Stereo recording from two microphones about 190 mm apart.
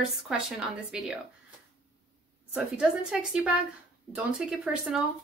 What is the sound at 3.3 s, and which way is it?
A woman's voice, 5° right (ahead or behind).